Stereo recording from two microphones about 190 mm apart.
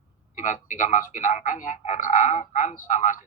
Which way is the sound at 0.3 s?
45° left (ahead or behind).